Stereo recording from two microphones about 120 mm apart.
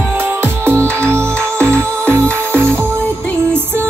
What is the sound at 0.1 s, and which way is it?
Music, 20° right (ahead or behind).